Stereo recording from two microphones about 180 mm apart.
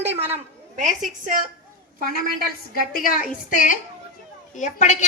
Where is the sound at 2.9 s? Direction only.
50° left (ahead or behind).